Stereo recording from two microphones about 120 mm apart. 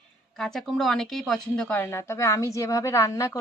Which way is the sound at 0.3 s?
5° left (ahead or behind).